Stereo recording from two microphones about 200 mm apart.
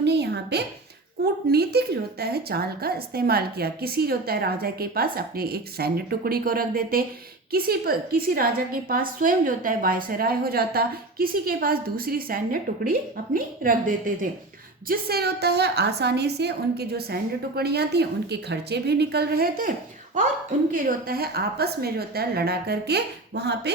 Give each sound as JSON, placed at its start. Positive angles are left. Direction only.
{"t": 0.0, "sound": "a sound", "side_deg": -55}
{"t": 1.2, "sound": "a woman's voice", "side_deg": -55}
{"t": 20.7, "sound": "a woman's voice", "side_deg": -45}